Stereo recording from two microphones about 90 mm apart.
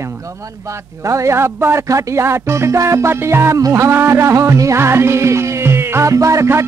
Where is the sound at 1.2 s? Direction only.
30° right (ahead or behind).